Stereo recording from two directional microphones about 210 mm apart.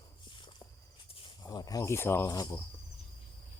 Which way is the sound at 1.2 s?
15° left (ahead or behind).